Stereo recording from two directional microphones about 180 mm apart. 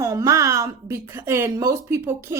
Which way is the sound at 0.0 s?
15° right (ahead or behind).